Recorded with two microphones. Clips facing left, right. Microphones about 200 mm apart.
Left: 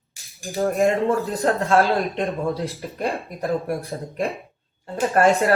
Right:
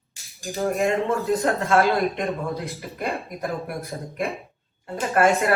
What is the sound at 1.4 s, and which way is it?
Speech, 30° left (ahead or behind).